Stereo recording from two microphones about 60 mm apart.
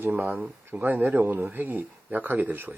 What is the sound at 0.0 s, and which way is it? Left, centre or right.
Speech, right.